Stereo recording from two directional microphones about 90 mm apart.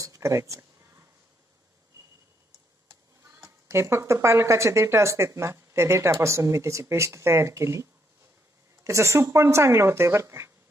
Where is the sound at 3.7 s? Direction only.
30° right (ahead or behind).